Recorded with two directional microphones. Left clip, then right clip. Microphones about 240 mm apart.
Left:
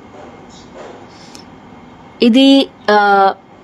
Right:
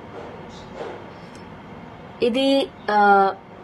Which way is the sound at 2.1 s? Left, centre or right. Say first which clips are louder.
Left 9 dB; left.